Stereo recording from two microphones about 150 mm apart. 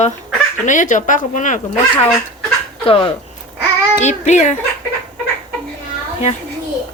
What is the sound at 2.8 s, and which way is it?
Speech, 35° left (ahead or behind).